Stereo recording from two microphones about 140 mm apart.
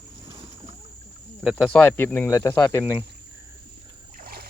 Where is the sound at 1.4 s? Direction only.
Centre (ahead or behind).